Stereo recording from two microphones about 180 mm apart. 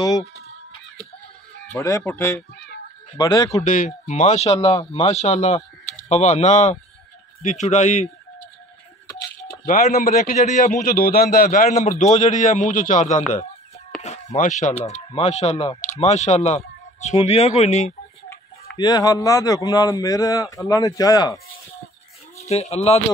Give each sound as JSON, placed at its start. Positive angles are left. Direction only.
{"t": 1.7, "sound": "a man's voice", "side_deg": 15}
{"t": 3.6, "sound": "speech", "side_deg": 45}
{"t": 9.5, "sound": "a man's voice", "side_deg": 50}
{"t": 14.0, "sound": "a sound", "side_deg": 40}
{"t": 14.8, "sound": "speech", "side_deg": 35}
{"t": 18.8, "sound": "a man's voice", "side_deg": 25}
{"t": 22.5, "sound": "speech", "side_deg": 35}